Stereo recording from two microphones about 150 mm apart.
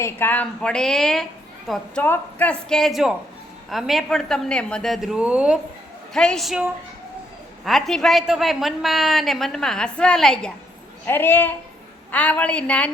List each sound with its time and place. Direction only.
0.0 s a woman's voice: 15° left (ahead or behind)
2.0 s a woman's voice: 15° left (ahead or behind)
11.0 s a woman's voice: 15° left (ahead or behind)